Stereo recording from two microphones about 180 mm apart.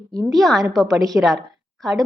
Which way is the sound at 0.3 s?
Centre (ahead or behind).